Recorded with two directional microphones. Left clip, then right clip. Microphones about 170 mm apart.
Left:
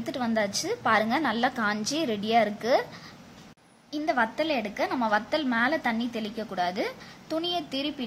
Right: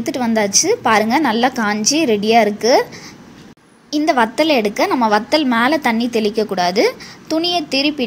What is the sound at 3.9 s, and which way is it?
A woman's voice, 25° right (ahead or behind).